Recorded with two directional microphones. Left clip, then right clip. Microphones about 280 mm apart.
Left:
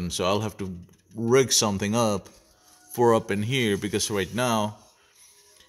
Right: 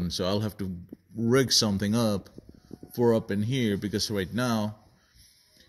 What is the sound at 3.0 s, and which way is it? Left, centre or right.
Speech, centre.